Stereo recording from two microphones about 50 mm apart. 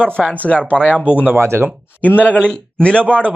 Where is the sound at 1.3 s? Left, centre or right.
Right.